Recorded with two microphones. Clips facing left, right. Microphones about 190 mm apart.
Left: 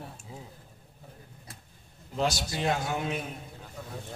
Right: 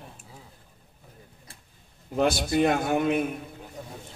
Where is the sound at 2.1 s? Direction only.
55° right (ahead or behind).